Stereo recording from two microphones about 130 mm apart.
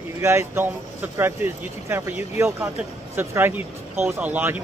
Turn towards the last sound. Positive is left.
turn(degrees=-15)  # may be behind; listen again after turning